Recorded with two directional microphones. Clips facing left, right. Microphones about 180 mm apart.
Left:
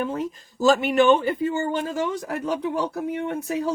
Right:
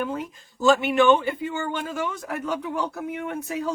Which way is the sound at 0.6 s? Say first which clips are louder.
Left 1 dB; 40° left (ahead or behind).